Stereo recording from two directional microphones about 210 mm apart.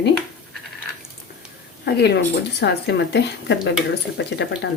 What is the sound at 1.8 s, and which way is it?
Speech, 50° left (ahead or behind).